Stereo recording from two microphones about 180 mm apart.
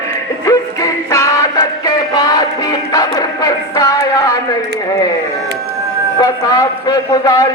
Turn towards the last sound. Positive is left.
turn(degrees=20)  # may be behind; listen again after turning